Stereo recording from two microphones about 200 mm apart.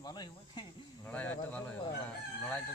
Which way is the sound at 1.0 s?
10° left (ahead or behind).